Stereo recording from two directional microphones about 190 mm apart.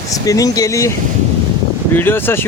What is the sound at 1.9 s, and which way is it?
Speech, 10° left (ahead or behind).